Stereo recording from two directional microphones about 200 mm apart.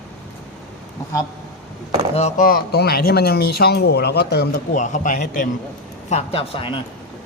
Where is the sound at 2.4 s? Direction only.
50° left (ahead or behind).